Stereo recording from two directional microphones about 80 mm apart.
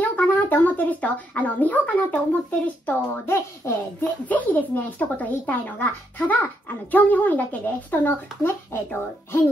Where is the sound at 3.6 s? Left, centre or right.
Left.